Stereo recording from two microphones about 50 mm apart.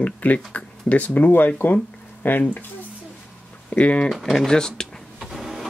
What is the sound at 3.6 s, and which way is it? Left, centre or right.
Speech, left.